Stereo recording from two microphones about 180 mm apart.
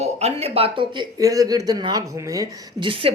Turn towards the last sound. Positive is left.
turn(degrees=-30)  # may be behind; listen again after turning